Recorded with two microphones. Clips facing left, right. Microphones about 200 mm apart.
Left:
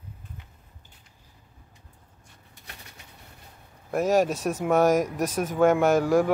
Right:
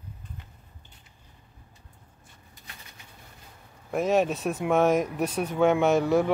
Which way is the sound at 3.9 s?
Centre (ahead or behind).